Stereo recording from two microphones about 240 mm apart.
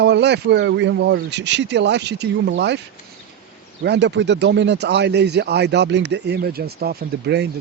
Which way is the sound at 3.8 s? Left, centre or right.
Right.